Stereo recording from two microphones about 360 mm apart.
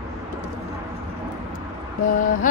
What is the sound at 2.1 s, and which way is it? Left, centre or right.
Mantra, left.